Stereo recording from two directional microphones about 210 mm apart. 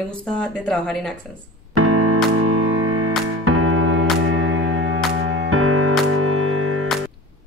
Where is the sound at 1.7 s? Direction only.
90° right.